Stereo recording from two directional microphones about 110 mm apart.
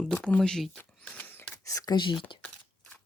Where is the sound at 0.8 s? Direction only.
15° left (ahead or behind).